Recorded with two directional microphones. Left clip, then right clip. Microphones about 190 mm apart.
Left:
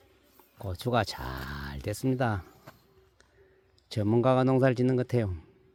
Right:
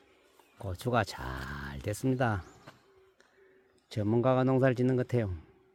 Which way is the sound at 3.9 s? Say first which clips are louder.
Left 3 dB; 10° left (ahead or behind).